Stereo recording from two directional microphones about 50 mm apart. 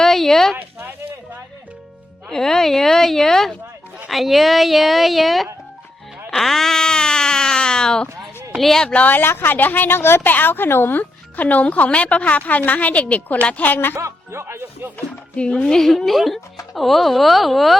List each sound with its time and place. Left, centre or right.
0.0 s a sound: centre
0.5 s a sound: right
2.3 s speech: centre
8.5 s speech: centre
8.9 s speech: left
9.2 s a woman's voice: left
10.2 s speech: left
13.9 s speech: right
15.4 s speech: left
15.8 s speech: centre